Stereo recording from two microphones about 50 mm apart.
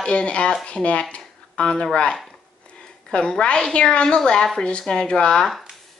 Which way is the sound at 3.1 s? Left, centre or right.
Centre.